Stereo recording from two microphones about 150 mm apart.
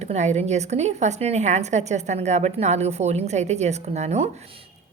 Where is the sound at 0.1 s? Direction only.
50° right (ahead or behind).